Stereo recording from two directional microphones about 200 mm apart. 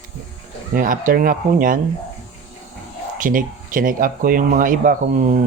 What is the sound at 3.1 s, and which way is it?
Speech, 40° right (ahead or behind).